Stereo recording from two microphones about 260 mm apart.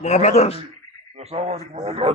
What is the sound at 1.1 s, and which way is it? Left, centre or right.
Speech, right.